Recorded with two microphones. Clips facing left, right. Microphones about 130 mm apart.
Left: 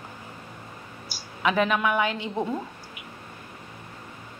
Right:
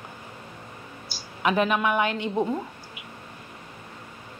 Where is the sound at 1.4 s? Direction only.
40° right (ahead or behind).